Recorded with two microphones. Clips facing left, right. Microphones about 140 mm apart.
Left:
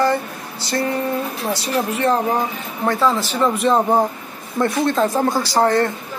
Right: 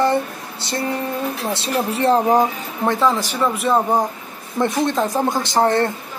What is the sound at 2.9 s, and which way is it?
A woman's voice, 15° right (ahead or behind).